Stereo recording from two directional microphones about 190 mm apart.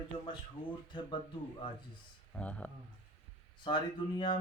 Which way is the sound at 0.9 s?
25° left (ahead or behind).